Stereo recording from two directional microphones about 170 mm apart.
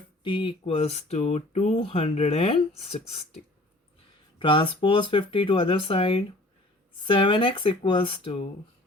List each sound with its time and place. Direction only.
0.2 s speech: 30° left (ahead or behind)